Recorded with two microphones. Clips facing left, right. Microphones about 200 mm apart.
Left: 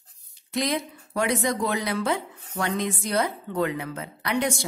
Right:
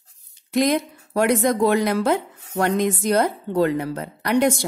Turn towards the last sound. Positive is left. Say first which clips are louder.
# right 7 dB
turn(degrees=-45)  # may be behind; listen again after turning